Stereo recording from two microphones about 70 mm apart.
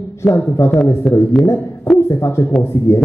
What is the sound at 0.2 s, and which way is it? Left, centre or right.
Speech, left.